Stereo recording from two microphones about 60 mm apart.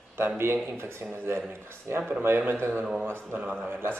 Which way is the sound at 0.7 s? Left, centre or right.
Right.